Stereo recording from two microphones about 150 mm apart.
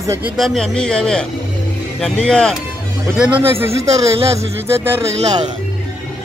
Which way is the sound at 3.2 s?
10° right (ahead or behind).